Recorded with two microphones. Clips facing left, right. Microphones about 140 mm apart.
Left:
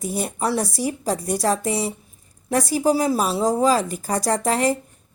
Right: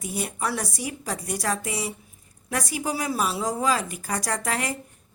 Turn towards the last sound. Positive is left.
turn(degrees=35)  # may be behind; listen again after turning